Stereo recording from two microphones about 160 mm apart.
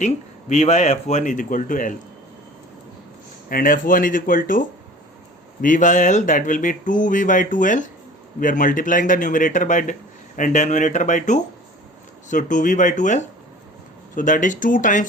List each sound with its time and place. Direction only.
0.0 s speech: 45° left (ahead or behind)
3.5 s speech: 60° left (ahead or behind)
5.6 s speech: 55° left (ahead or behind)